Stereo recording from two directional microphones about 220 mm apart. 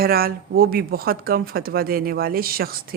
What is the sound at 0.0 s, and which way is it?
A woman's voice, 45° right (ahead or behind).